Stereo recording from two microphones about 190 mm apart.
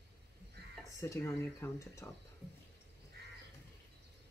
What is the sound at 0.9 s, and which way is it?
Speech, 15° left (ahead or behind).